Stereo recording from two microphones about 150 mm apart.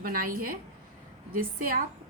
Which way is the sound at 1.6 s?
75° right (ahead or behind).